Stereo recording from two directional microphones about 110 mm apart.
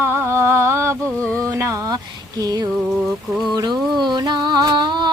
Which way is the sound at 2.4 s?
35° right (ahead or behind).